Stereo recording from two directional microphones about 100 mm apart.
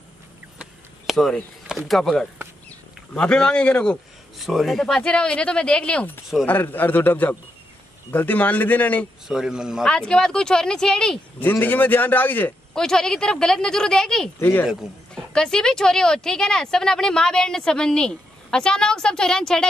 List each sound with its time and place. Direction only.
0.6 s a sound: centre (ahead or behind)
3.2 s speech: 10° left (ahead or behind)
4.4 s a man's voice: centre (ahead or behind); by 9.0 s 15° left (ahead or behind)
9.3 s speech: 5° right (ahead or behind)
9.8 s speech: 10° left (ahead or behind)
11.4 s speech: 20° left (ahead or behind)
12.7 s speech: 5° left (ahead or behind)
14.4 s a man's voice: 20° left (ahead or behind)
14.7 s a man's voice: 5° right (ahead or behind)
15.3 s speech: 5° left (ahead or behind)